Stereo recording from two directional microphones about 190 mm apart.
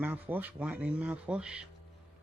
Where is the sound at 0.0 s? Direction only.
10° right (ahead or behind).